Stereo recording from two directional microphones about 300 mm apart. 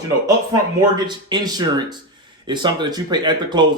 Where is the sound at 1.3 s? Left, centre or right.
Centre.